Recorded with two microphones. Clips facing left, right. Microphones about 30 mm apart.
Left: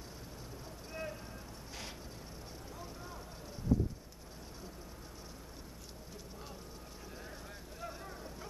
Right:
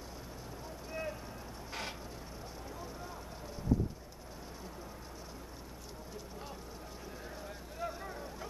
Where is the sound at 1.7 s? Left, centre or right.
Right.